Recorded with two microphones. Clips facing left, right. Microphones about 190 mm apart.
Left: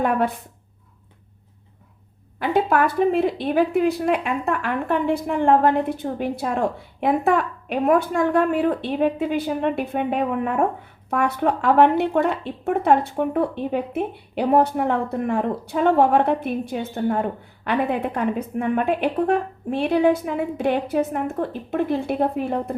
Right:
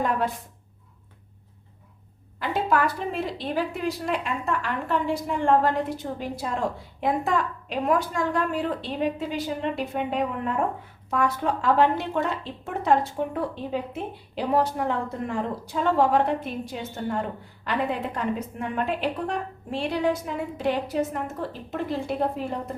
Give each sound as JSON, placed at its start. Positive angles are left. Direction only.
{"t": 0.0, "sound": "a woman's voice", "side_deg": 60}
{"t": 2.4, "sound": "speech", "side_deg": 55}